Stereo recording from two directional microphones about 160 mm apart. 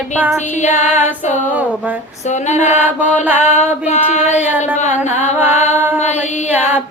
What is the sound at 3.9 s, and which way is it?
Child singing, 45° left (ahead or behind).